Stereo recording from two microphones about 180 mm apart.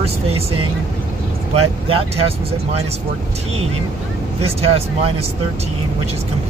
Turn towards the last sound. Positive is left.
turn(degrees=-35)  # may be behind; listen again after turning